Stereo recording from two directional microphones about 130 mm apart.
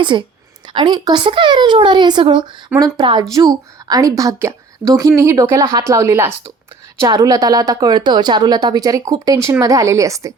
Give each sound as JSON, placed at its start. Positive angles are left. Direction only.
{"t": 0.0, "sound": "a woman's voice", "side_deg": -40}